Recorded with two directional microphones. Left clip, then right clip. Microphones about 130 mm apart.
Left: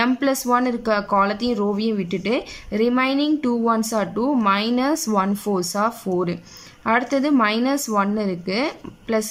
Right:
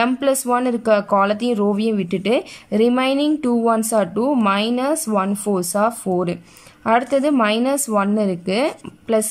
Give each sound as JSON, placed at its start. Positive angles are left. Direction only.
{"t": 0.0, "sound": "speech", "side_deg": -20}